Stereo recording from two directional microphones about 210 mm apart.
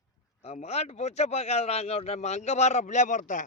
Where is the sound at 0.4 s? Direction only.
30° left (ahead or behind).